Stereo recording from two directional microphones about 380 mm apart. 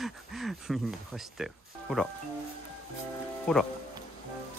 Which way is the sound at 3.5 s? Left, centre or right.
Centre.